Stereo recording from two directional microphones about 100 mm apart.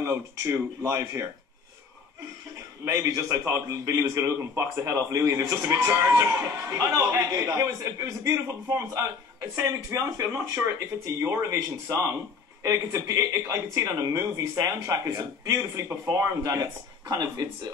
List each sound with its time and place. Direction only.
0.0 s a man's voice: 30° right (ahead or behind)
2.8 s a man's voice: 35° right (ahead or behind)